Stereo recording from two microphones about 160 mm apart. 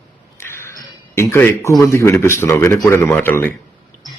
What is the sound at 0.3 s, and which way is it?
Chink, 15° left (ahead or behind).